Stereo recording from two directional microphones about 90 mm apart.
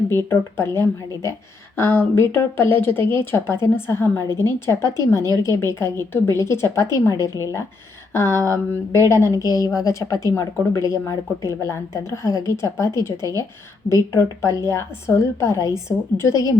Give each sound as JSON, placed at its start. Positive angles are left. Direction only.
{"t": 0.3, "sound": "a woman's voice", "side_deg": 25}